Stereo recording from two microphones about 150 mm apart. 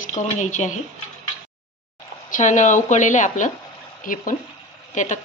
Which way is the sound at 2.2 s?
60° left (ahead or behind).